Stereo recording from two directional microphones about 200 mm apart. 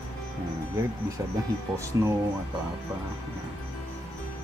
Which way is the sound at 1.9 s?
15° right (ahead or behind).